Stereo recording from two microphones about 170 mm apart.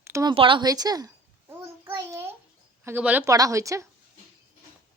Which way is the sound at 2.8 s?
10° right (ahead or behind).